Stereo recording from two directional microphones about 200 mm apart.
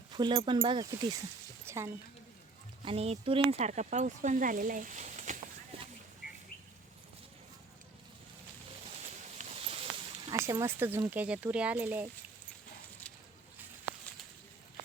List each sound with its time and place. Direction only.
0.1 s speech: 20° right (ahead or behind)
1.6 s a sound: 15° right (ahead or behind)
2.8 s speech: 30° right (ahead or behind)
6.2 s bird: 5° right (ahead or behind)
9.2 s a sound: 35° right (ahead or behind)
10.3 s speech: 15° right (ahead or behind)